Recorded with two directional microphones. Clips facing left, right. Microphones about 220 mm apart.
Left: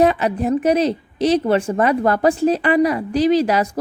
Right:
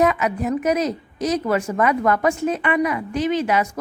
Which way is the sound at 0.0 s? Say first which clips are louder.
Left 3 dB; 30° left (ahead or behind).